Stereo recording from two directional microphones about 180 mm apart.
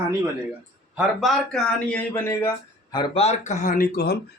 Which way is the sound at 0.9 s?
5° right (ahead or behind).